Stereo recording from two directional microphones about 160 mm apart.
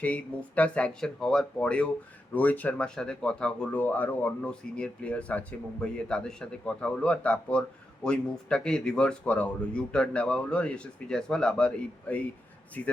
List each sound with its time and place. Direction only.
0.0 s speech: 10° left (ahead or behind)